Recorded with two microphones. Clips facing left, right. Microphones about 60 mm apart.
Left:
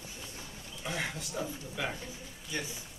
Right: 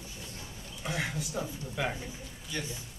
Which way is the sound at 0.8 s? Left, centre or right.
Centre.